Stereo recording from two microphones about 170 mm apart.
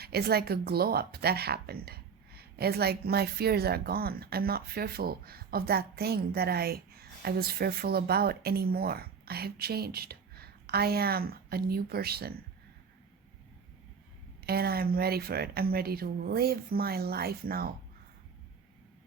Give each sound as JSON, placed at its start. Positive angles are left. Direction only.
{"t": 0.0, "sound": "speech", "side_deg": -65}
{"t": 14.4, "sound": "speech", "side_deg": -65}